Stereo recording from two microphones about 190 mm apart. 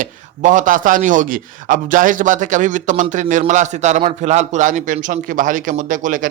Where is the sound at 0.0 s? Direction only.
45° right (ahead or behind).